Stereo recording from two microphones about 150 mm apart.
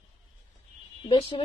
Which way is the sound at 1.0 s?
35° left (ahead or behind).